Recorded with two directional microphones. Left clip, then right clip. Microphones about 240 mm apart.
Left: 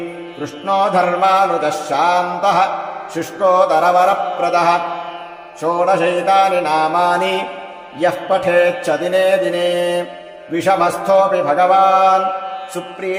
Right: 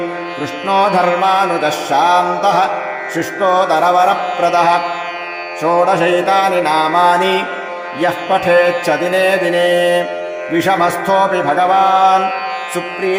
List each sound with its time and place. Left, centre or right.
0.7 s music: centre
5.8 s music: right